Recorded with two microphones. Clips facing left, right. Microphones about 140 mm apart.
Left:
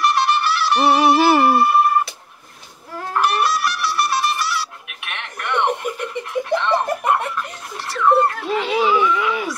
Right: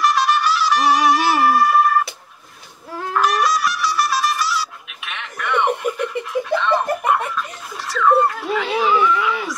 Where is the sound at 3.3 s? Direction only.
60° left (ahead or behind).